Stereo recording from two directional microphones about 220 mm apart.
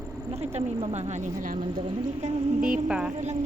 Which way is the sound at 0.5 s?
25° right (ahead or behind).